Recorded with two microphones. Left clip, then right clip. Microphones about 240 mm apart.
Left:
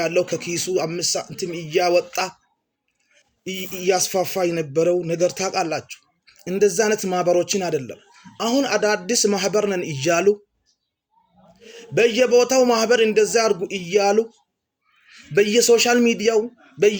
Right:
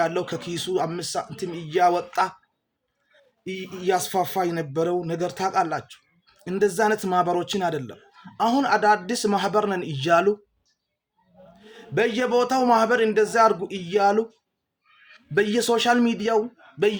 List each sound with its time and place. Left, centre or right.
0.0 s a man's voice: right
3.4 s a man's voice: right
11.6 s a man's voice: right
15.3 s a man's voice: centre